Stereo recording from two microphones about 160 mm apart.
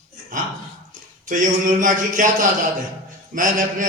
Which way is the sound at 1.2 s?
55° right (ahead or behind).